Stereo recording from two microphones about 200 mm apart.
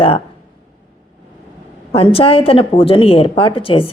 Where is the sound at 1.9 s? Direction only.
30° left (ahead or behind).